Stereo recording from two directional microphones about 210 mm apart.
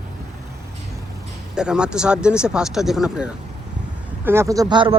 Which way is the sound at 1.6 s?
5° right (ahead or behind).